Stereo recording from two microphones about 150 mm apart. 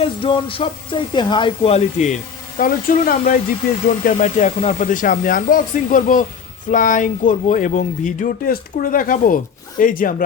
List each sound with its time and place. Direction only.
0.0 s speech: 35° left (ahead or behind)
1.7 s speech: 50° left (ahead or behind)
2.6 s speech: 70° left (ahead or behind)
3.8 s speech: 55° left (ahead or behind)